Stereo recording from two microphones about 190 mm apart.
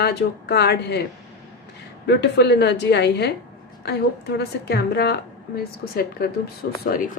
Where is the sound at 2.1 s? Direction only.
65° left (ahead or behind).